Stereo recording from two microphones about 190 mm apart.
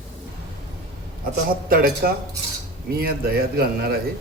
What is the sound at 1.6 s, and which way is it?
A man's voice, 50° right (ahead or behind).